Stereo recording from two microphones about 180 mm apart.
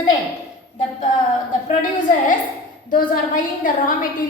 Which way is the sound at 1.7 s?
45° left (ahead or behind).